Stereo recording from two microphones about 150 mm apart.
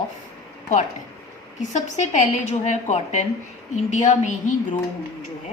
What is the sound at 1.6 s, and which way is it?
A woman's voice, 50° left (ahead or behind).